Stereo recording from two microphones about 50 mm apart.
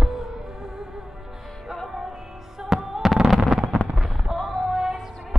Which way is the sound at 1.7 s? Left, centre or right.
Centre.